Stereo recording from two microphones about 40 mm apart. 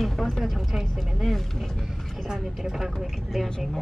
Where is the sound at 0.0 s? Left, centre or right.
Centre.